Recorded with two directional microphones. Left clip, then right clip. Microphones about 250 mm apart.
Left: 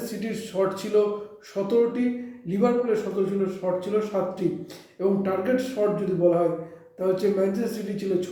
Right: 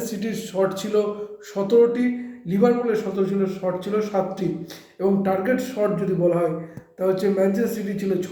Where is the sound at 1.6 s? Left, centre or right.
Right.